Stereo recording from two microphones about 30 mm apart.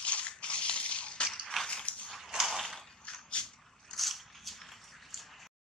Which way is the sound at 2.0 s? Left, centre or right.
Centre.